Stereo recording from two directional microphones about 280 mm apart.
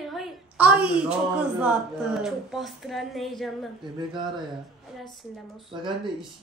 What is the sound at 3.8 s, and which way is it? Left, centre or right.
Speech, centre.